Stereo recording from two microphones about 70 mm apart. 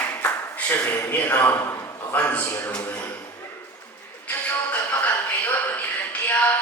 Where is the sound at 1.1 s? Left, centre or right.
Left.